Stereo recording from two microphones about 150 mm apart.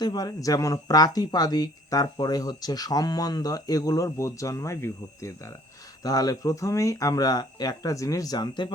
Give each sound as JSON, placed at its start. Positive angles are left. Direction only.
{"t": 0.0, "sound": "speech", "side_deg": 30}